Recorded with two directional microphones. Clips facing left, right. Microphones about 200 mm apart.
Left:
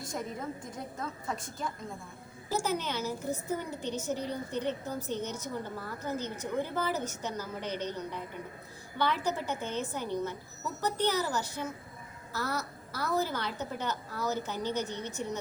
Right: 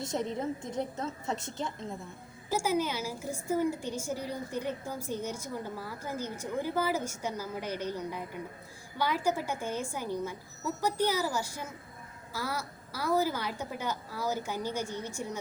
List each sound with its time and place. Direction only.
0.0 s a woman's voice: 25° right (ahead or behind)
2.5 s a woman's voice: 10° right (ahead or behind)